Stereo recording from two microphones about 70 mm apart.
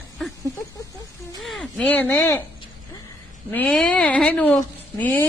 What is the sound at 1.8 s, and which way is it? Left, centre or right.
Speech, left.